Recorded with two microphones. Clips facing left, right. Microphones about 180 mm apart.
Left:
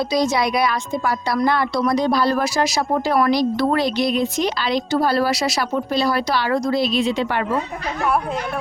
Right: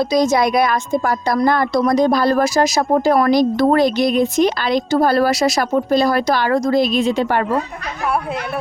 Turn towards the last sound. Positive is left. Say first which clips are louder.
# right 4 dB
turn(degrees=-45)  # may be behind; listen again after turning